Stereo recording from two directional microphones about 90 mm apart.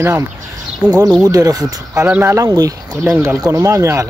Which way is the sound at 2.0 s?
25° right (ahead or behind).